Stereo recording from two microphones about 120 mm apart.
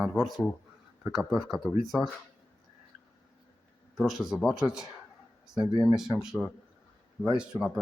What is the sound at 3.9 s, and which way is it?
Speech, centre (ahead or behind).